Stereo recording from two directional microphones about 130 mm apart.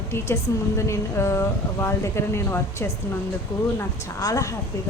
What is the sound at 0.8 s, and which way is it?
Speech, 20° left (ahead or behind).